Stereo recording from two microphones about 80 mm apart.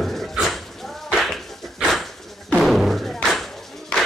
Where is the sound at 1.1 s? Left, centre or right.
Centre.